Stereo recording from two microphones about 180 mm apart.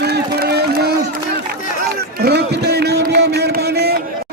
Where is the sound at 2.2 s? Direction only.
65° right (ahead or behind).